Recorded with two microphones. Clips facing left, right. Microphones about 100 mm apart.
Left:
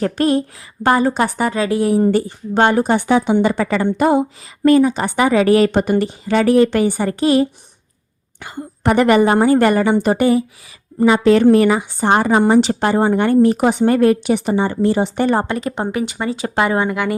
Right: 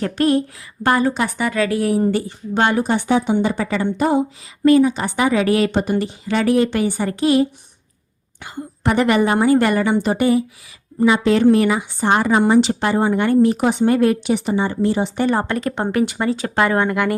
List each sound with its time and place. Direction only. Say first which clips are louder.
0.0 s speech: left 1 dB; 30° left (ahead or behind)
1.1 s speech: left 3 dB; 40° left (ahead or behind)
1.5 s speech: left 1 dB; 25° left (ahead or behind)
2.0 s a woman's voice: left 4 dB; 40° left (ahead or behind)
3.1 s a woman's voice: left 3 dB; 85° left; by 4.7 s 60° left (ahead or behind)
4.7 s speech: left 1 dB; 45° left (ahead or behind)
5.7 s a woman's voice: left 3 dB; 60° left (ahead or behind)
6.2 s speech: left 4 dB; 40° left (ahead or behind)
8.4 s a woman's voice: left 1 dB; 50° left (ahead or behind)
9.2 s a woman's voice: left 3 dB; 35° left (ahead or behind)
12.3 s speech: left 1 dB; 35° left (ahead or behind)
12.5 s a woman's voice: left 2 dB; 45° left (ahead or behind)
15.4 s speech: even; 10° left (ahead or behind)
16.4 s speech: left 2 dB; 15° left (ahead or behind)